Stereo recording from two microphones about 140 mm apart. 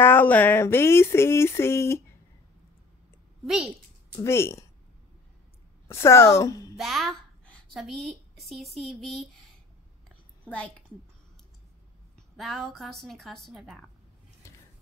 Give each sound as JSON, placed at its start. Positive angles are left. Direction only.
{"t": 0.0, "sound": "speech", "side_deg": 15}
{"t": 4.2, "sound": "speech", "side_deg": 20}
{"t": 5.9, "sound": "speech", "side_deg": 20}
{"t": 6.8, "sound": "a woman's voice", "side_deg": 0}
{"t": 10.0, "sound": "a sound", "side_deg": 10}
{"t": 12.4, "sound": "a woman's voice", "side_deg": 0}